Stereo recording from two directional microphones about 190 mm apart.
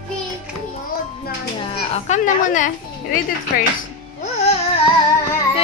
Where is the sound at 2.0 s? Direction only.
40° left (ahead or behind).